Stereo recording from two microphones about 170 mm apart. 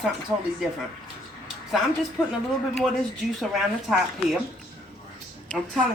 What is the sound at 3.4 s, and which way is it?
A woman's voice, centre (ahead or behind).